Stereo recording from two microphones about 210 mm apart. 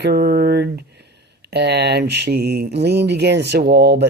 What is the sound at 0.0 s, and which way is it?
Speech, 50° right (ahead or behind).